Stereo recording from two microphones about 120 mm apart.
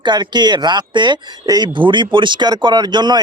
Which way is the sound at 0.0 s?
40° right (ahead or behind).